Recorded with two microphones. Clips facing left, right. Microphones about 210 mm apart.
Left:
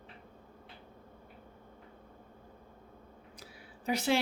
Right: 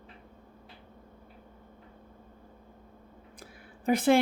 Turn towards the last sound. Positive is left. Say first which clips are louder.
# right 7 dB
turn(degrees=-50)  # may be behind; listen again after turning